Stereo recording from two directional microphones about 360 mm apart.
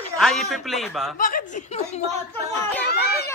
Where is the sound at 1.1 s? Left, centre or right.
Left.